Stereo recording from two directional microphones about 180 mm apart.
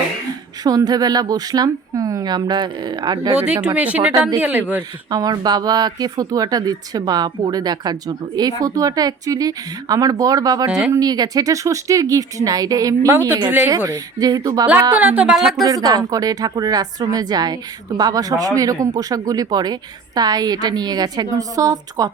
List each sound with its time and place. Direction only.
0.6 s speech: 20° right (ahead or behind)
3.4 s speech: 5° right (ahead or behind)
5.1 s speech: 20° right (ahead or behind)
10.7 s speech: 5° right (ahead or behind)
10.9 s speech: 20° right (ahead or behind)
14.9 s speech: 10° right (ahead or behind)
15.6 s speech: 20° right (ahead or behind)